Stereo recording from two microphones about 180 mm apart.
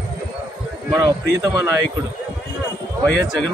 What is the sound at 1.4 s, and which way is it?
Speech, 20° right (ahead or behind).